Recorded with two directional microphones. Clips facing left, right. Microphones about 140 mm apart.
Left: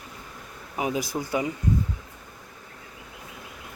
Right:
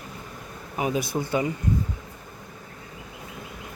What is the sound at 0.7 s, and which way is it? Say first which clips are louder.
Speech: right 2 dB; 15° left (ahead or behind).